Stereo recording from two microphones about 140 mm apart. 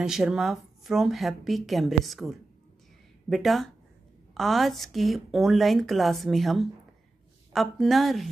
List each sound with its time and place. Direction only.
0.0 s a woman's voice: 5° right (ahead or behind)